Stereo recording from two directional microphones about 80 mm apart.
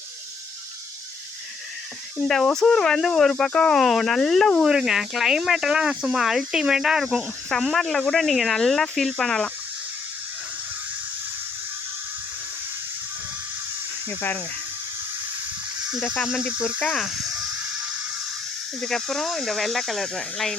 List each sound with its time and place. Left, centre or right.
2.2 s speech: centre
4.6 s speech: centre
14.1 s speech: left
15.9 s speech: centre
17.0 s speech: centre
18.8 s speech: centre